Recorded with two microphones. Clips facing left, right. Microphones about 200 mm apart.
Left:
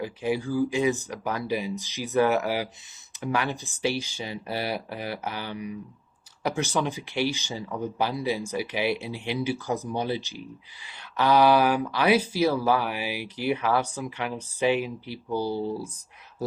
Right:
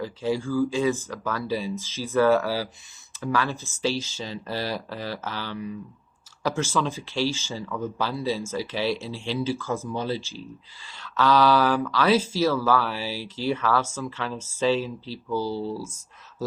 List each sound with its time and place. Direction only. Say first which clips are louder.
0.0 s speech: right 1 dB; 15° left (ahead or behind)